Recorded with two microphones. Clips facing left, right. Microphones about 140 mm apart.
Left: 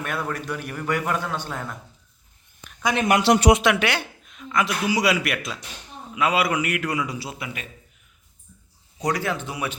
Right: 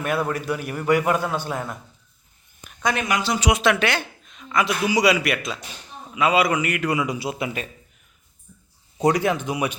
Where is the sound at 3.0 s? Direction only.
65° left (ahead or behind).